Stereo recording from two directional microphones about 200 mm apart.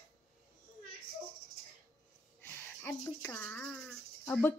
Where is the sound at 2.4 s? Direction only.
10° left (ahead or behind).